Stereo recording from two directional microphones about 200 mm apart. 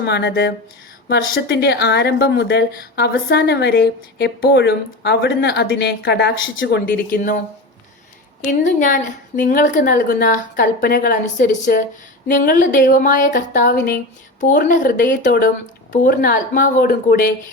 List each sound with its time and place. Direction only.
0.0 s speech: 55° left (ahead or behind)
8.4 s a woman's voice: 40° left (ahead or behind)